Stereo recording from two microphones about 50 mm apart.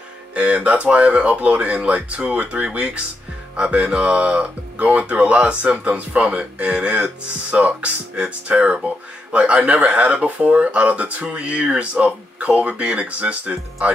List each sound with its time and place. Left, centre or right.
0.3 s speech: right